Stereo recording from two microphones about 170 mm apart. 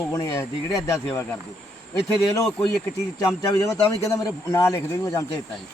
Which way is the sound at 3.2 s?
20° left (ahead or behind).